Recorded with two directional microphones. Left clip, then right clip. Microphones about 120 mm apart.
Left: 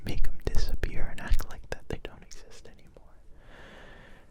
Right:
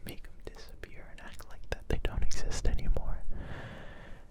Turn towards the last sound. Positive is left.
turn(degrees=-5)  # may be behind; listen again after turning